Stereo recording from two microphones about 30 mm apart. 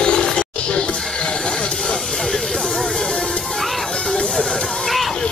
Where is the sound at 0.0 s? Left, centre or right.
Left.